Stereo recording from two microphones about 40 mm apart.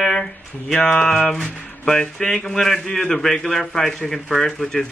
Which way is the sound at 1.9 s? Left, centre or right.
Centre.